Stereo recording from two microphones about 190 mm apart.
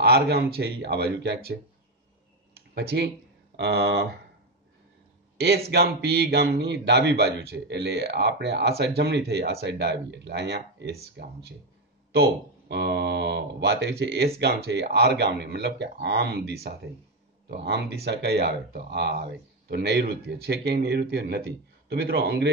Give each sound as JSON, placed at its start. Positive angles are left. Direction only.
{"t": 0.0, "sound": "speech", "side_deg": -55}
{"t": 2.9, "sound": "speech", "side_deg": -65}
{"t": 5.7, "sound": "speech", "side_deg": -60}
{"t": 12.1, "sound": "speech", "side_deg": -60}